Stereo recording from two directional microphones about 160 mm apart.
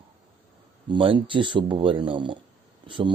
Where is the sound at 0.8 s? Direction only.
30° right (ahead or behind).